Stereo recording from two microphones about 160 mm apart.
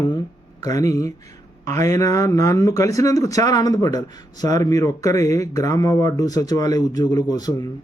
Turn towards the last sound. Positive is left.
turn(degrees=25)  # may be behind; listen again after turning